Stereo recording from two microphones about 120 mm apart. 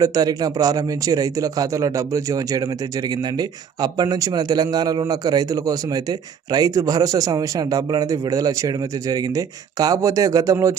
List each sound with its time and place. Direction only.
0.0 s a man's voice: 30° right (ahead or behind)